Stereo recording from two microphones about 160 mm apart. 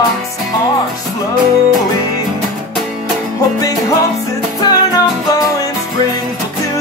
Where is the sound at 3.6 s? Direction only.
25° left (ahead or behind).